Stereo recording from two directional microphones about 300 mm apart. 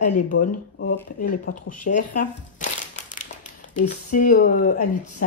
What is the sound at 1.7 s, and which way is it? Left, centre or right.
Speech, left.